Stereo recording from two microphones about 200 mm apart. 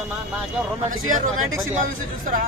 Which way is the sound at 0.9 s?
40° right (ahead or behind).